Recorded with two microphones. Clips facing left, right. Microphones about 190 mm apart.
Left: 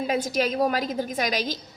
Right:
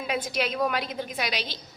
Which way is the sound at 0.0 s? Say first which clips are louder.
Left 4 dB; 40° left (ahead or behind).